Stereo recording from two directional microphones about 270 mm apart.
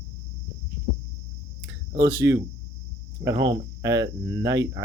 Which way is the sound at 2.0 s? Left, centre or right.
Centre.